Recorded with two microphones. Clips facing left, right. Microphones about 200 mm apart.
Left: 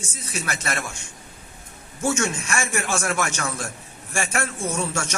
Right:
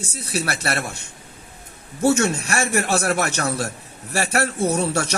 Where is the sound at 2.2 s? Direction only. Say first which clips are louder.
Right 4 dB; 60° right (ahead or behind).